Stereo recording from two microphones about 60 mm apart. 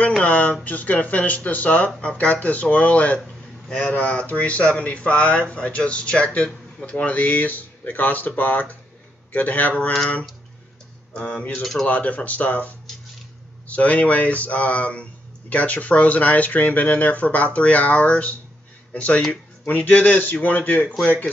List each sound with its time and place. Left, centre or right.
0.2 s speech: left
11.1 s speech: centre
20.8 s speech: centre